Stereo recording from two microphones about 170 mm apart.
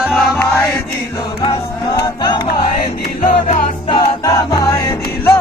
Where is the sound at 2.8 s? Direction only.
50° left (ahead or behind).